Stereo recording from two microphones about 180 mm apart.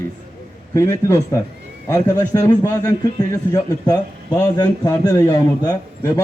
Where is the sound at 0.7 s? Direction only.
15° left (ahead or behind).